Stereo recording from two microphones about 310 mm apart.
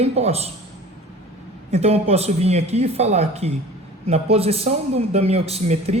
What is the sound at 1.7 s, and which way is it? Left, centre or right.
Speech, centre.